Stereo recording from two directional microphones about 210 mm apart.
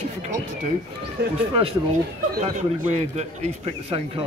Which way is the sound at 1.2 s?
50° right (ahead or behind).